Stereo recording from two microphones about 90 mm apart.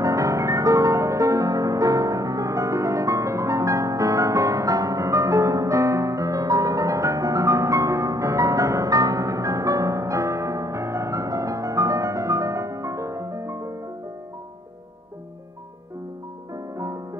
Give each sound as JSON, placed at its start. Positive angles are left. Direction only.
{"t": 0.0, "sound": "music", "side_deg": -35}
{"t": 16.7, "sound": "music", "side_deg": -35}